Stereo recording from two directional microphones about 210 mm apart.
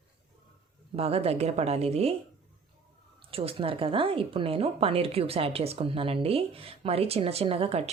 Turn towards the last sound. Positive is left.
turn(degrees=-30)  # may be behind; listen again after turning